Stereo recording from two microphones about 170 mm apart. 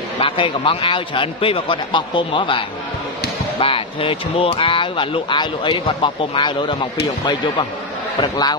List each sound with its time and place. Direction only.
0.2 s a man's voice: 30° left (ahead or behind)
8.2 s speech: 25° left (ahead or behind)